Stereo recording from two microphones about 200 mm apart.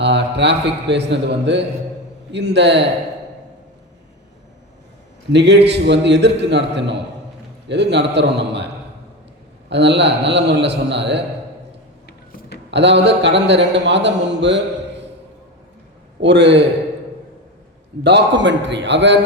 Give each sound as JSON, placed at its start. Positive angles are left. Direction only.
{"t": 0.0, "sound": "a man's voice", "side_deg": -60}
{"t": 5.3, "sound": "a man's voice", "side_deg": -60}
{"t": 12.0, "sound": "a sound", "side_deg": 55}
{"t": 12.7, "sound": "a man's voice", "side_deg": -60}
{"t": 16.2, "sound": "a man's voice", "side_deg": -60}
{"t": 18.0, "sound": "a man's voice", "side_deg": -60}